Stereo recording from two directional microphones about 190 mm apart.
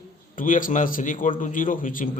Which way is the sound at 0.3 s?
45° left (ahead or behind).